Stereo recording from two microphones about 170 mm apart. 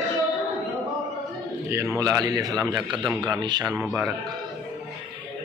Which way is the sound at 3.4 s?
25° right (ahead or behind).